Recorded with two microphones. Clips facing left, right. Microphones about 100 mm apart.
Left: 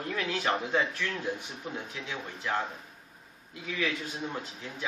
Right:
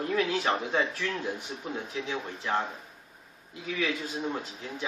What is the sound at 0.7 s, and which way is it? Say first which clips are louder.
Speech: right 1 dB; 20° right (ahead or behind).